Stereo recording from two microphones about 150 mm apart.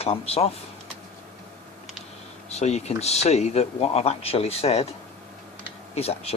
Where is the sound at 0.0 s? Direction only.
40° left (ahead or behind).